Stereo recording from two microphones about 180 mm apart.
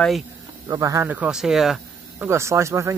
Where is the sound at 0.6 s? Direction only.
20° right (ahead or behind).